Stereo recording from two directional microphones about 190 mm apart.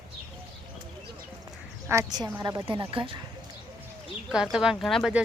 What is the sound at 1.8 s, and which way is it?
A woman's voice, 20° right (ahead or behind).